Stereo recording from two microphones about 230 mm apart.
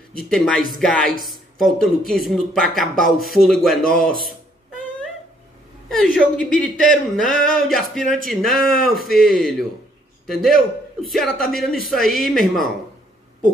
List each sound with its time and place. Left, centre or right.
0.3 s speech: centre
5.9 s speech: centre